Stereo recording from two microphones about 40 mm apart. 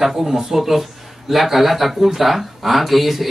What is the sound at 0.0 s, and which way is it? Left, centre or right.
Speech, centre.